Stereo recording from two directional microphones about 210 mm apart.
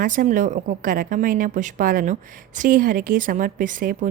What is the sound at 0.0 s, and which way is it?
A woman's voice, 40° right (ahead or behind).